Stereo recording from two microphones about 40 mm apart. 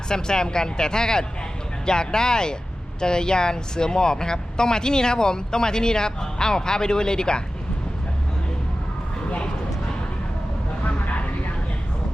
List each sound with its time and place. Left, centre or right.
0.1 s speech: centre
10.8 s vehicle: left